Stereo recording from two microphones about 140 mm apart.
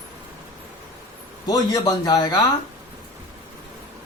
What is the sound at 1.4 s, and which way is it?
Speech, 30° left (ahead or behind).